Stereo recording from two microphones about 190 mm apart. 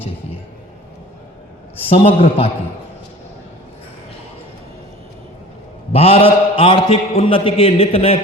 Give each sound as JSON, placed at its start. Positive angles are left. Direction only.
{"t": 1.9, "sound": "a man's voice", "side_deg": 30}
{"t": 5.9, "sound": "a man's voice", "side_deg": 30}